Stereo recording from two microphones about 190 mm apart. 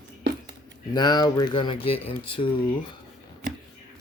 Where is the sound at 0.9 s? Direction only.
20° left (ahead or behind).